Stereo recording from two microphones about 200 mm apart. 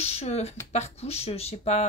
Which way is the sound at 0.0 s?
30° left (ahead or behind).